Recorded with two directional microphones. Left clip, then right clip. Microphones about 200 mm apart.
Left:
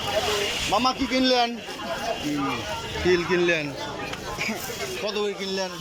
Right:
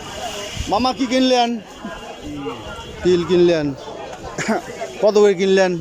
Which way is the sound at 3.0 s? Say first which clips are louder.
Right 7 dB; 20° right (ahead or behind).